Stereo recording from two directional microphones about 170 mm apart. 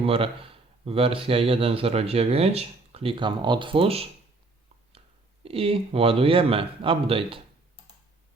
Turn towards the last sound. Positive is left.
turn(degrees=-30)  # may be behind; listen again after turning